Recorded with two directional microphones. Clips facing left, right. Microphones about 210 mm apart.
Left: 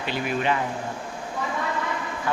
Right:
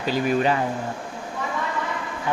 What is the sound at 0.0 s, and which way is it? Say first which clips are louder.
Speech: right 5 dB; 40° right (ahead or behind).